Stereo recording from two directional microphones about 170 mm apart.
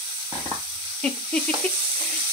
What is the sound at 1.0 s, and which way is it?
Speech, 5° left (ahead or behind).